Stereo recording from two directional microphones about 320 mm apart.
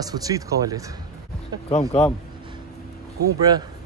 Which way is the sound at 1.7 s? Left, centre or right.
Centre.